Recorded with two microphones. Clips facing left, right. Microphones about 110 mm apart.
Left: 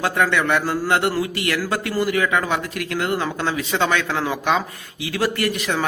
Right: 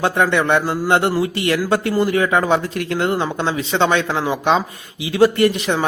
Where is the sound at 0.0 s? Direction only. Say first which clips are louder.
Right 3 dB; 25° right (ahead or behind).